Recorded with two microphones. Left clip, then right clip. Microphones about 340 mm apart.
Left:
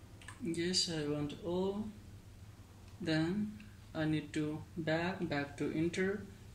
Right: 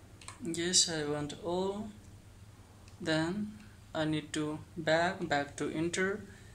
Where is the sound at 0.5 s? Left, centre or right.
Centre.